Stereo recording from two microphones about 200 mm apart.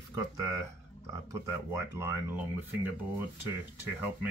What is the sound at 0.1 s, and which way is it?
Speech, 15° right (ahead or behind).